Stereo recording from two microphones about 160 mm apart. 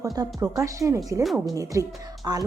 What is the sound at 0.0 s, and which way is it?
A woman's voice, 25° right (ahead or behind).